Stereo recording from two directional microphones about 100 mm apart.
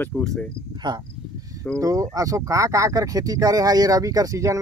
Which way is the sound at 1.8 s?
35° right (ahead or behind).